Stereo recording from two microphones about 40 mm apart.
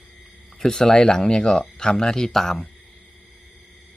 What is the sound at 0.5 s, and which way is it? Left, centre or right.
Speech, centre.